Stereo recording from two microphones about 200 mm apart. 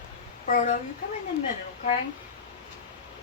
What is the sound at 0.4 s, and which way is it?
Speech, 40° left (ahead or behind).